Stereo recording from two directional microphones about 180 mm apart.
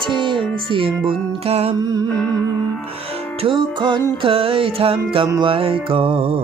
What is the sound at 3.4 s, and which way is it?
Music, 25° right (ahead or behind).